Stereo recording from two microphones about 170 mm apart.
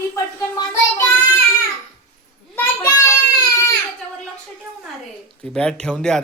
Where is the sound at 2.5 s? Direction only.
15° left (ahead or behind).